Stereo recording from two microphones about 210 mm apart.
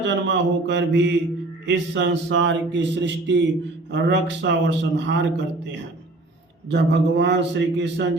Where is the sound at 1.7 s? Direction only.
60° right (ahead or behind).